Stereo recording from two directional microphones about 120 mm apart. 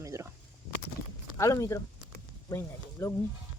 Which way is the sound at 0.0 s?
25° right (ahead or behind).